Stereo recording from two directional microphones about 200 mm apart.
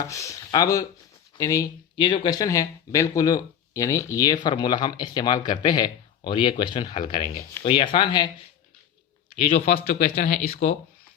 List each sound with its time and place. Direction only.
0.0 s speech: 15° left (ahead or behind)
9.8 s speech: 40° left (ahead or behind)